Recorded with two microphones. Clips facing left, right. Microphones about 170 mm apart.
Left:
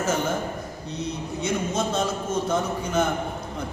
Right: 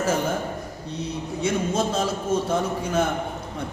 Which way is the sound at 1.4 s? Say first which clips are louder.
Right 3 dB; 30° right (ahead or behind).